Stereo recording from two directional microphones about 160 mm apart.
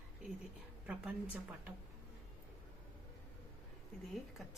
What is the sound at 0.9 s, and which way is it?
Speech, 10° right (ahead or behind).